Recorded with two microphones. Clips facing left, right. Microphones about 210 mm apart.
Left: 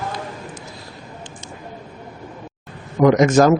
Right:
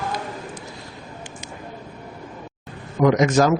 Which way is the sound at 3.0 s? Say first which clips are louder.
Left 4 dB; 50° left (ahead or behind).